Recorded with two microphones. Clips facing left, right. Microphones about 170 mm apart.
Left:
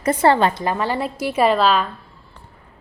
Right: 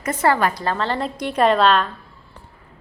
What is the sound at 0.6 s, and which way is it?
A woman's voice, 15° left (ahead or behind).